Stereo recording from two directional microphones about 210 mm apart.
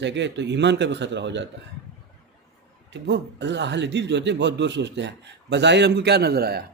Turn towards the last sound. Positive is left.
turn(degrees=-50)  # may be behind; listen again after turning